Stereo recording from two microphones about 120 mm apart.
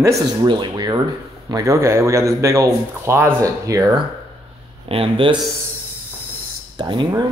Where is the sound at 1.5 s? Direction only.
30° right (ahead or behind).